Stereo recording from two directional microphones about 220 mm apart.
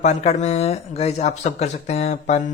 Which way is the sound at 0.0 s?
30° left (ahead or behind).